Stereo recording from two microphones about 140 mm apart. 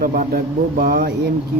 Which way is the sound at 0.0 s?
90° right.